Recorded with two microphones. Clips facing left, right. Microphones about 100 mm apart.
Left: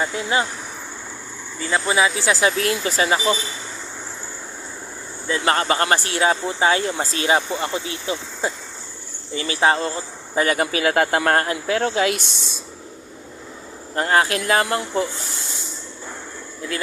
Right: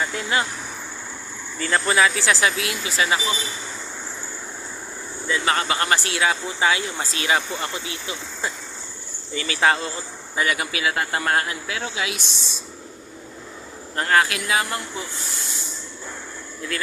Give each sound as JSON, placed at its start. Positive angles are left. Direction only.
{"t": 0.0, "sound": "speech", "side_deg": 20}
{"t": 1.7, "sound": "speech", "side_deg": 10}
{"t": 2.6, "sound": "speech", "side_deg": 45}
{"t": 5.3, "sound": "speech", "side_deg": 35}
{"t": 10.9, "sound": "speech", "side_deg": 60}
{"t": 11.3, "sound": "speech", "side_deg": 40}
{"t": 11.8, "sound": "speech", "side_deg": 50}
{"t": 13.9, "sound": "speech", "side_deg": 25}
{"t": 14.3, "sound": "speech", "side_deg": 45}